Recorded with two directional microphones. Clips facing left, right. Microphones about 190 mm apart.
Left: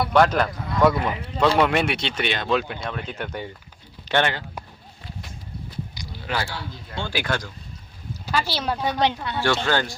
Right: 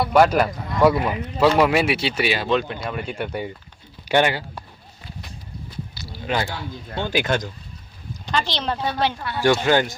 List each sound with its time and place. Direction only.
0.0 s a man's voice: 5° right (ahead or behind)
2.8 s a man's voice: 10° right (ahead or behind)
6.2 s speech: 20° right (ahead or behind)
8.3 s a woman's voice: 5° left (ahead or behind)
9.6 s a man's voice: 15° right (ahead or behind)